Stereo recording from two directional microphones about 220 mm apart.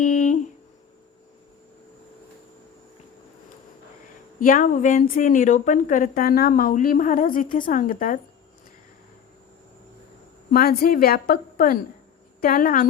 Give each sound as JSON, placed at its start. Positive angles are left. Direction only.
{"t": 0.0, "sound": "a sound", "side_deg": 35}
{"t": 4.4, "sound": "speech", "side_deg": 40}
{"t": 10.5, "sound": "a woman's voice", "side_deg": 45}